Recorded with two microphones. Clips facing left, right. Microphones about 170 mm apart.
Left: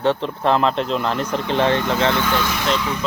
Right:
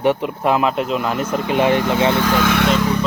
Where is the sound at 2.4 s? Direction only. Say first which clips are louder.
Right 5 dB; 60° right (ahead or behind).